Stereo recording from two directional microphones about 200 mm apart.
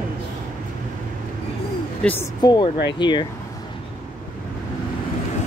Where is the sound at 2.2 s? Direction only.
20° left (ahead or behind).